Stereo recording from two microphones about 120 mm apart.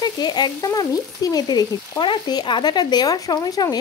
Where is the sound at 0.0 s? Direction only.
35° left (ahead or behind).